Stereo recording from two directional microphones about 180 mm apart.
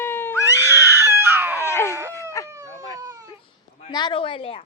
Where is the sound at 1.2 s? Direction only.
10° right (ahead or behind).